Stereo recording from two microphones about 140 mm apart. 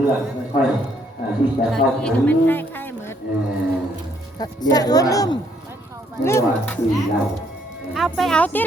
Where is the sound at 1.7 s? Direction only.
5° left (ahead or behind).